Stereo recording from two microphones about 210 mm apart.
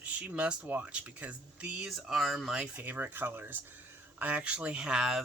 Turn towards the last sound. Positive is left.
turn(degrees=-5)  # may be behind; listen again after turning